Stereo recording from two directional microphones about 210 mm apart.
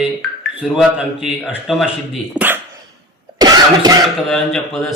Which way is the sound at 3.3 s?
20° right (ahead or behind).